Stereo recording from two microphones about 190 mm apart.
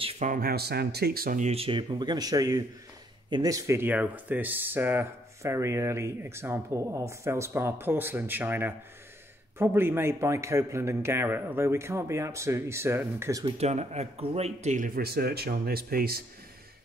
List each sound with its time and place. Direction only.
0.0 s speech: 40° right (ahead or behind); by 13.5 s 15° right (ahead or behind)
13.6 s speech: 35° right (ahead or behind)
15.0 s speech: 55° right (ahead or behind)